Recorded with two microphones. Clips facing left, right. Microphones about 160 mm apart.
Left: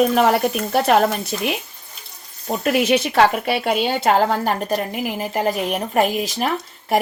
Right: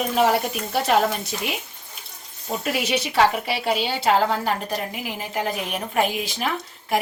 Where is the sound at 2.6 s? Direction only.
55° left (ahead or behind).